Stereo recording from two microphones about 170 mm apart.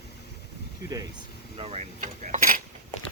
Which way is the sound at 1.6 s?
35° right (ahead or behind).